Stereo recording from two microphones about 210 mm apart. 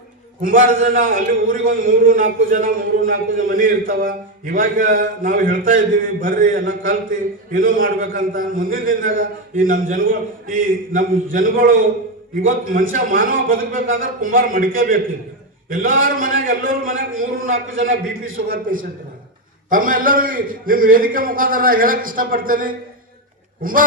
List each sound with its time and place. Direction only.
0.4 s a man's voice: 40° right (ahead or behind)